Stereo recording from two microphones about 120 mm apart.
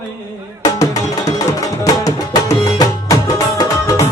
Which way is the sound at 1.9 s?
30° left (ahead or behind).